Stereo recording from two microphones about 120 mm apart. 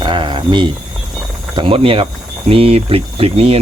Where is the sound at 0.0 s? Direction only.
40° right (ahead or behind).